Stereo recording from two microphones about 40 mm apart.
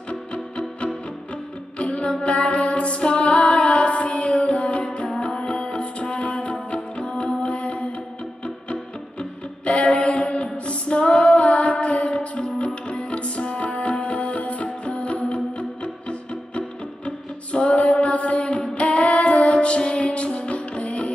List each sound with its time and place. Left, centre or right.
0.1 s music: left
2.2 s music: left
9.7 s female singing: left